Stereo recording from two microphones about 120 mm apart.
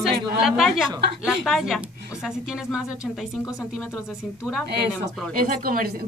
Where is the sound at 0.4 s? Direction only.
Centre (ahead or behind).